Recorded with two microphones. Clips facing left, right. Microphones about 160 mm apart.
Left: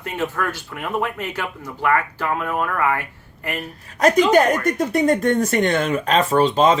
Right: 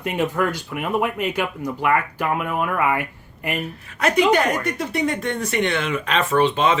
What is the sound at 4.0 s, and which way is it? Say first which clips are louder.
Speech: left 3 dB; 40° left (ahead or behind).